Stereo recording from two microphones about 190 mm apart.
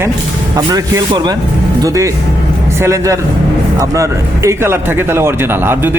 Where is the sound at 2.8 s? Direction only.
15° right (ahead or behind).